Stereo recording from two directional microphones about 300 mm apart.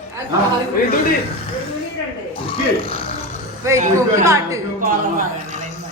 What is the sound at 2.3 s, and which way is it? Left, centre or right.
Speech, centre.